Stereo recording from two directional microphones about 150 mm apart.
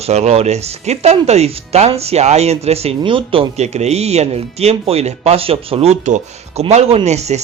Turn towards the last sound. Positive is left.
turn(degrees=-50)  # may be behind; listen again after turning